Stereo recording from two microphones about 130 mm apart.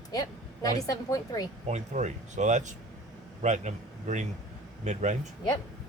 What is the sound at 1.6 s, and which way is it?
A man's voice, 65° right (ahead or behind).